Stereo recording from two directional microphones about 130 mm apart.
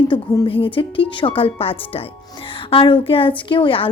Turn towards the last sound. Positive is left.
turn(degrees=40)  # may be behind; listen again after turning